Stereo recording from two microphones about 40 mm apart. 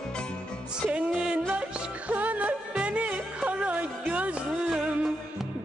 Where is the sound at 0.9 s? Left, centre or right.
Right.